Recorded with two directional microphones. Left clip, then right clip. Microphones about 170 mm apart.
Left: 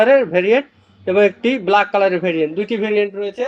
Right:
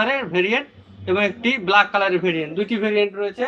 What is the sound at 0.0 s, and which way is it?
A man's voice, 25° left (ahead or behind).